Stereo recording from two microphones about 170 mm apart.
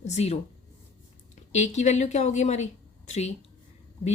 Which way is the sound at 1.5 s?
40° left (ahead or behind).